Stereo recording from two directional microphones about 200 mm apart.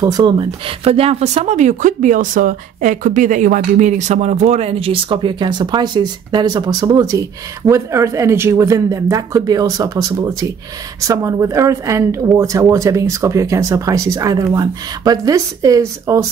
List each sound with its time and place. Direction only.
0.0 s speech: 20° right (ahead or behind)